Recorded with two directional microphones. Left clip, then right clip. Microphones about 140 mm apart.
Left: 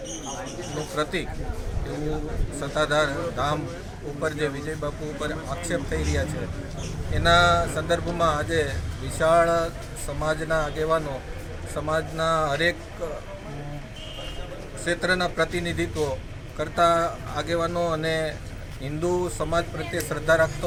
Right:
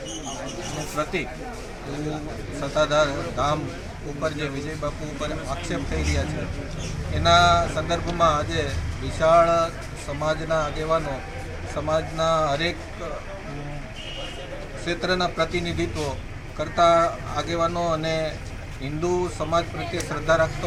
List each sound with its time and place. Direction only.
2.6 s speech: 20° left (ahead or behind)
5.2 s speech: 20° left (ahead or behind)
14.8 s speech: 20° left (ahead or behind)